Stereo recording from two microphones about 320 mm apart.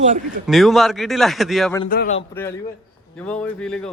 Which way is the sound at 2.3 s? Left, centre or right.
Centre.